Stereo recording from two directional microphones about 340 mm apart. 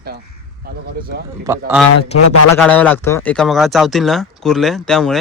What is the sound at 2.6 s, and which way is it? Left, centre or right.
Speech, centre.